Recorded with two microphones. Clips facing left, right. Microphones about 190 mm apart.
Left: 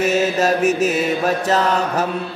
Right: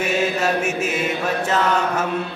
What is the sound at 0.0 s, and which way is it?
Mantra, 40° left (ahead or behind).